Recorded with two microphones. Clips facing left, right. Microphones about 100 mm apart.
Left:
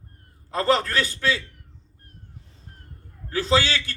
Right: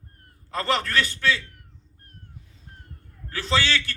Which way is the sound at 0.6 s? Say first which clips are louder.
Left 3 dB; 35° left (ahead or behind).